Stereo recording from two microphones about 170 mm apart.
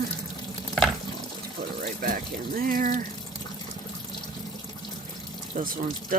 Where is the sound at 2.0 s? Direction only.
60° right (ahead or behind).